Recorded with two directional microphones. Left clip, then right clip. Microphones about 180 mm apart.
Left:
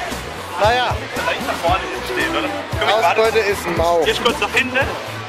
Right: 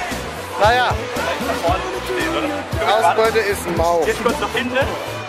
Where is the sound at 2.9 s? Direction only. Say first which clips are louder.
Even; 5° left (ahead or behind).